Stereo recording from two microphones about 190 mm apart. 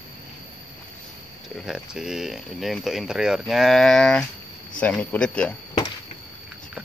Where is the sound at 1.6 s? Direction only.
5° right (ahead or behind).